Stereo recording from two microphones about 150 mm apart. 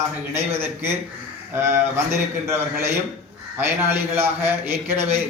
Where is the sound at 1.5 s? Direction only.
15° right (ahead or behind).